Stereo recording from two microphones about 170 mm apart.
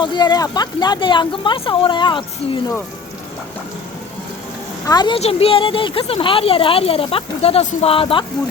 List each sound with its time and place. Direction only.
0.0 s speech: 25° left (ahead or behind)
4.9 s speech: 25° left (ahead or behind)